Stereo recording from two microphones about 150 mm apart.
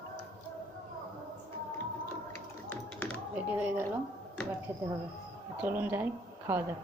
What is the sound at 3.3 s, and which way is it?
Speech, 15° right (ahead or behind).